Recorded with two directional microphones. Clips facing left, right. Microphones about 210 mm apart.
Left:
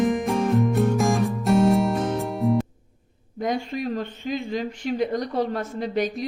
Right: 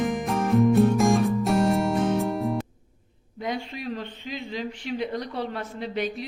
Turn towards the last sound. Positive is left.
turn(degrees=45)  # may be behind; listen again after turning